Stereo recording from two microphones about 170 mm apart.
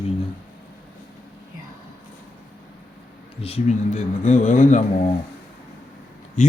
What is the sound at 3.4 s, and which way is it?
Speech, 40° left (ahead or behind).